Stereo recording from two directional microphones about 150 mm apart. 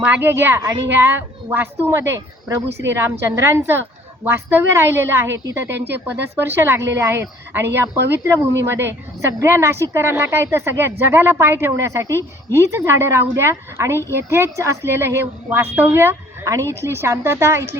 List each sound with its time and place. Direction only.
0.0 s speech: 15° right (ahead or behind)